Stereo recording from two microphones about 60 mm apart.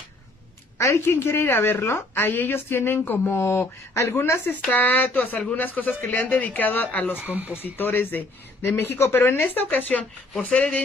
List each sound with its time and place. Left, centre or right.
0.7 s a woman's voice: left
4.5 s speech: left
7.2 s speech: right
7.5 s speech: left